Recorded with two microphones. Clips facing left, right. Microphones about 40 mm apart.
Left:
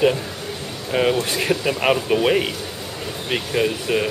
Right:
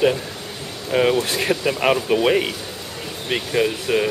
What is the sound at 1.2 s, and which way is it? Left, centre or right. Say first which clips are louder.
Speech: even; centre.